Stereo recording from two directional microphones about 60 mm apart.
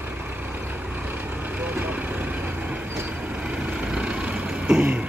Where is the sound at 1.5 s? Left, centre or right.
Right.